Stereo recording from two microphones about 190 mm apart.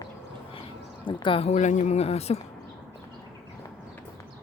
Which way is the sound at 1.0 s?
25° left (ahead or behind).